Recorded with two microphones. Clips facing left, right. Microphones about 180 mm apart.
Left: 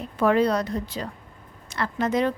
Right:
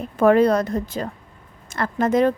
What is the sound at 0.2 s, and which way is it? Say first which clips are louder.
A woman's voice: right 5 dB; 50° right (ahead or behind).